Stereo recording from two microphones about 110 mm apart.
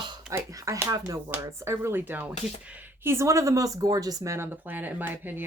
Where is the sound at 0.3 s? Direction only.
25° right (ahead or behind).